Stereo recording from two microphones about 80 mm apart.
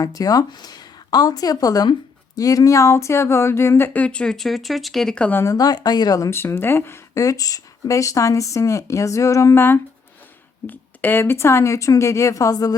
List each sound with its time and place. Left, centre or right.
0.0 s speech: left; by 5.1 s centre
5.5 s speech: left
6.3 s speech: left
7.2 s speech: left
9.6 s speech: left